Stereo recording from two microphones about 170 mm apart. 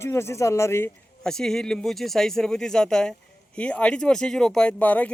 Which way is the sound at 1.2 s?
5° left (ahead or behind).